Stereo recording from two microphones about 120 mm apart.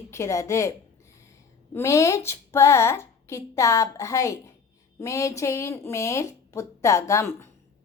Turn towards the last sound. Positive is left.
turn(degrees=25)  # may be behind; listen again after turning